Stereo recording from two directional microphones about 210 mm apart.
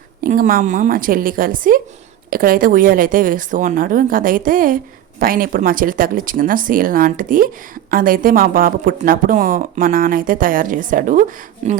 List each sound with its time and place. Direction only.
0.2 s speech: 40° right (ahead or behind)